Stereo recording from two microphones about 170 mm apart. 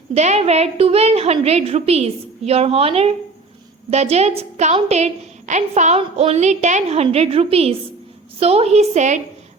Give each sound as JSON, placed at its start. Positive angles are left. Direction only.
{"t": 0.1, "sound": "a woman's voice", "side_deg": -40}